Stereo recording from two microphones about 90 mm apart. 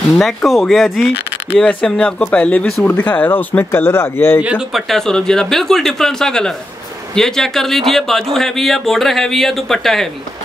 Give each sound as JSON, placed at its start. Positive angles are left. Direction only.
{"t": 0.2, "sound": "speech", "side_deg": 0}
{"t": 1.5, "sound": "speech", "side_deg": 15}
{"t": 4.4, "sound": "speech", "side_deg": -15}
{"t": 4.7, "sound": "speech", "side_deg": 5}